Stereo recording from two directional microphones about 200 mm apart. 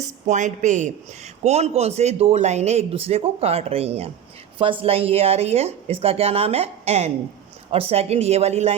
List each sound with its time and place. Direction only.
0.3 s a man's voice: 35° right (ahead or behind)